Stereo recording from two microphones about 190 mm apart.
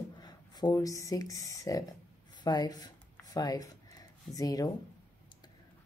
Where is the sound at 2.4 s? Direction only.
20° left (ahead or behind).